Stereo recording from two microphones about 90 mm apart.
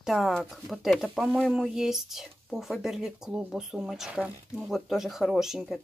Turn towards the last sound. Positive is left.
turn(degrees=-5)  # may be behind; listen again after turning